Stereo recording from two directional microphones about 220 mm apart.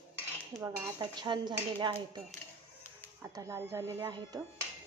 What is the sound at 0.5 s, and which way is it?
Dishes, 15° right (ahead or behind).